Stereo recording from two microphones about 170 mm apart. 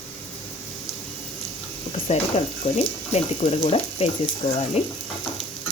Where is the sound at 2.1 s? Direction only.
40° left (ahead or behind).